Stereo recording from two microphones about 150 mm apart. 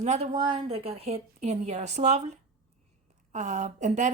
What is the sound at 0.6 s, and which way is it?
Speech, 40° right (ahead or behind).